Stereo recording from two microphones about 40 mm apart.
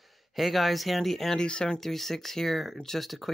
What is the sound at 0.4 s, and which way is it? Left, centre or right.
Speech, centre.